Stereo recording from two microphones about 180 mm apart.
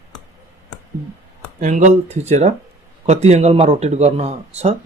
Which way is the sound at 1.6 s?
40° right (ahead or behind).